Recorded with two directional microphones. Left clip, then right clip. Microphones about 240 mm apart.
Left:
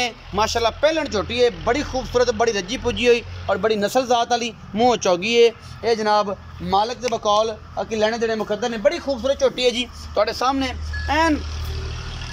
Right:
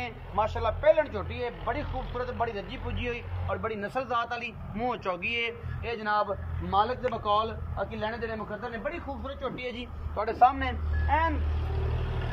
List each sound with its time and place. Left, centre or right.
0.0 s a man's voice: left
9.4 s speech: left